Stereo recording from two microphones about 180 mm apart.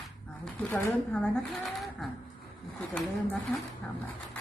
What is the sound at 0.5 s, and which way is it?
Speech, 15° left (ahead or behind).